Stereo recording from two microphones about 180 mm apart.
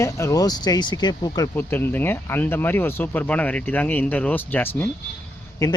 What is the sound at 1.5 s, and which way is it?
Speech, 10° left (ahead or behind).